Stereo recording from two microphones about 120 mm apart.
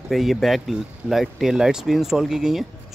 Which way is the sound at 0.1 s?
Centre (ahead or behind).